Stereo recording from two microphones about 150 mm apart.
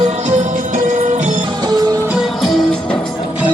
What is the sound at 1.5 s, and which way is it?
Music, 30° right (ahead or behind).